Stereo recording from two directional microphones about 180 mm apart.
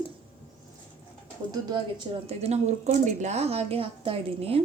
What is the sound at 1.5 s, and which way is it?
A woman's voice, 25° right (ahead or behind).